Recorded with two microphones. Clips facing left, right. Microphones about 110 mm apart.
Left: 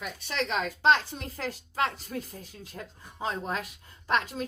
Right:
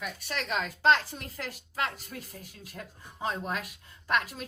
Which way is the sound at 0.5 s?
20° left (ahead or behind).